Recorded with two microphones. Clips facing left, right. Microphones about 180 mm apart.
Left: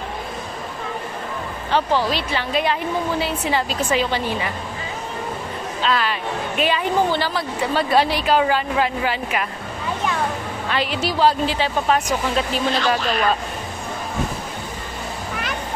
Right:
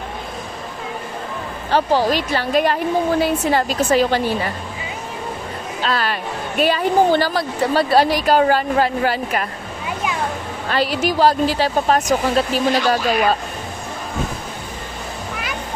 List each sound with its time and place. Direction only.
1.7 s speech: 40° right (ahead or behind)
5.8 s a woman's voice: 40° right (ahead or behind)
10.7 s a woman's voice: 40° right (ahead or behind)
13.0 s speech: 10° right (ahead or behind)